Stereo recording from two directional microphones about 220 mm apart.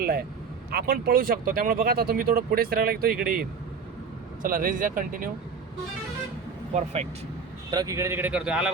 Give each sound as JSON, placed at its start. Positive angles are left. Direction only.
{"t": 0.7, "sound": "speech", "side_deg": -45}
{"t": 4.4, "sound": "speech", "side_deg": -40}
{"t": 6.7, "sound": "speech", "side_deg": -30}
{"t": 7.7, "sound": "speech", "side_deg": -15}